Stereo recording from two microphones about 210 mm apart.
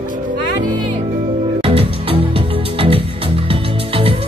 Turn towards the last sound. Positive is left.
turn(degrees=-25)  # may be behind; listen again after turning